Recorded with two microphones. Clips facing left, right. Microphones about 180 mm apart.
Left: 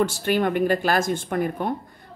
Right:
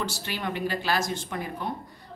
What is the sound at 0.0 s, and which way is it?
A woman's voice, 50° left (ahead or behind).